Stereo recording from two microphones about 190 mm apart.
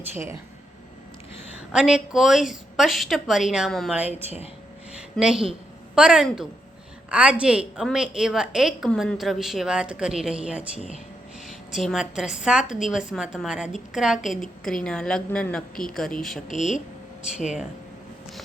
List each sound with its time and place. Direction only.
0.1 s speech: 15° right (ahead or behind)
1.7 s a woman's voice: 5° right (ahead or behind)
4.9 s a sound: 5° right (ahead or behind)
5.9 s a woman's voice: 5° right (ahead or behind)
11.8 s a woman's voice: centre (ahead or behind)
16.5 s speech: 40° left (ahead or behind)